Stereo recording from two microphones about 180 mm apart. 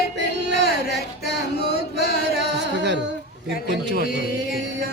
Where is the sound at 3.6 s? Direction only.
70° right (ahead or behind).